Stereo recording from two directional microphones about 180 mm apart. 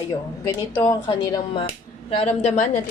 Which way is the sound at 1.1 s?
30° left (ahead or behind).